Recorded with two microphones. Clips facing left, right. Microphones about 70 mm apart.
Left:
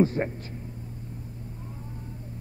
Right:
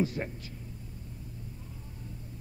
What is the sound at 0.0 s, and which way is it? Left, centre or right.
Speech, left.